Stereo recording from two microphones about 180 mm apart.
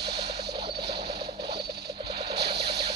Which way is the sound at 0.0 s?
65° right (ahead or behind).